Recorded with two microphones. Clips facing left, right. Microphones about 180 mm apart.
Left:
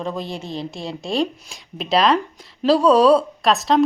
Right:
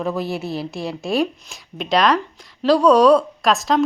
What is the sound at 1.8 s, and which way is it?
Speech, 30° left (ahead or behind).